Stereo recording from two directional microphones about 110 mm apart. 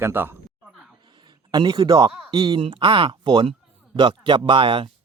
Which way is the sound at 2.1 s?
5° right (ahead or behind).